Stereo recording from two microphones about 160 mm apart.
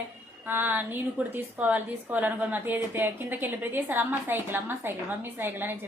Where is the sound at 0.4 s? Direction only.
10° right (ahead or behind).